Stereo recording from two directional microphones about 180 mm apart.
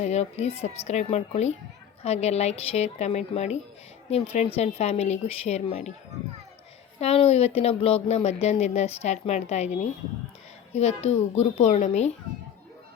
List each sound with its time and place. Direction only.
0.0 s speech: 40° left (ahead or behind)
7.0 s speech: 35° left (ahead or behind)